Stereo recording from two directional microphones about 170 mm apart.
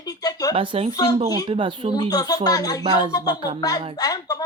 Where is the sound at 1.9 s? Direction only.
20° left (ahead or behind).